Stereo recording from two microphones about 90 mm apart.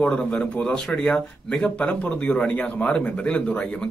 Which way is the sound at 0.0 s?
15° left (ahead or behind).